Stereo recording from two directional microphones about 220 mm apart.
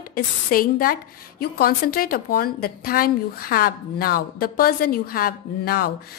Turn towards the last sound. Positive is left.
turn(degrees=45)  # may be behind; listen again after turning